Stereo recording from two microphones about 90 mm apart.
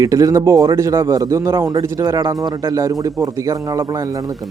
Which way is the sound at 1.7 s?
45° right (ahead or behind).